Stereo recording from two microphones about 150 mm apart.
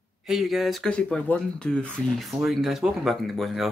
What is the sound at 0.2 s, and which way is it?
Speech, centre (ahead or behind).